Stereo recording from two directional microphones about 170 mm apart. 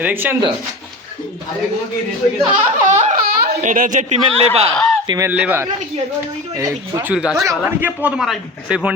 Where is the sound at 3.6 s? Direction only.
50° right (ahead or behind).